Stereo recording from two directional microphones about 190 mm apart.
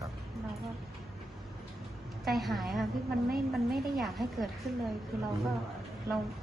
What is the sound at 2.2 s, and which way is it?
Speech, centre (ahead or behind).